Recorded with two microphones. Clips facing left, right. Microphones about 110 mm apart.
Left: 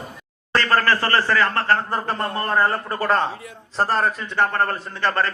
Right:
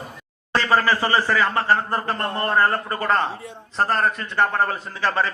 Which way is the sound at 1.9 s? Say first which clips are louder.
Even; centre (ahead or behind).